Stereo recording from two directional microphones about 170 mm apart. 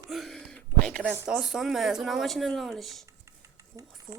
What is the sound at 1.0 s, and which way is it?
Speech, 10° right (ahead or behind).